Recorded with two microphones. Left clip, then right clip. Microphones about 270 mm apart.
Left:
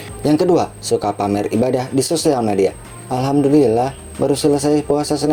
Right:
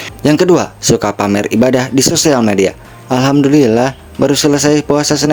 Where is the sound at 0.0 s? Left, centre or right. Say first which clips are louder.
Right 5 dB; right.